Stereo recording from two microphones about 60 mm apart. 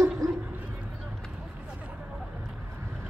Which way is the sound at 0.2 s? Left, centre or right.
Right.